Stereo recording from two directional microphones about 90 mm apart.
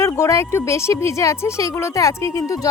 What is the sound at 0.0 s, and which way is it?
A woman's voice, 30° left (ahead or behind).